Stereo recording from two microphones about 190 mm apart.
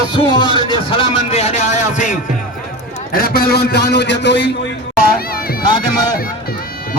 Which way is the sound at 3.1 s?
50° left (ahead or behind).